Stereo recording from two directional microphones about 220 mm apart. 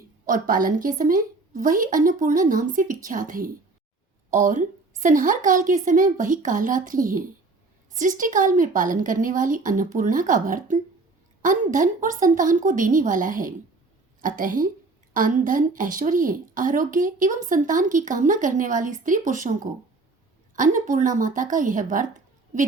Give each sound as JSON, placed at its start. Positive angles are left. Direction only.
{"t": 0.3, "sound": "a woman's voice", "side_deg": -40}
{"t": 20.6, "sound": "a woman's voice", "side_deg": -35}